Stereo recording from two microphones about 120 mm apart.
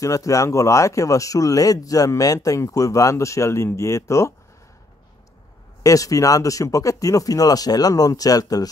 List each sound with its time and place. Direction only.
0.0 s speech: 25° left (ahead or behind)
5.8 s speech: 30° left (ahead or behind)